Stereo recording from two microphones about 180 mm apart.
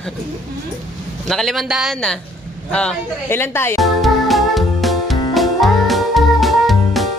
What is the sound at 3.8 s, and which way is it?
Music, centre (ahead or behind).